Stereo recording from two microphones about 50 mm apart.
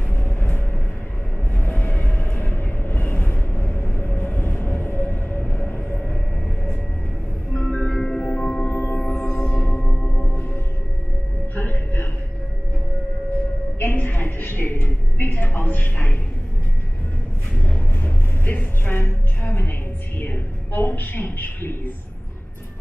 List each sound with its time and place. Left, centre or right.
0.1 s vehicle: left
1.6 s vehicle: left
5.3 s music: left
7.5 s music: centre
8.6 s gong: left
9.5 s singing bowl: left
11.5 s a sound: left
13.7 s a sound: left
18.0 s music: left
18.9 s a sound: left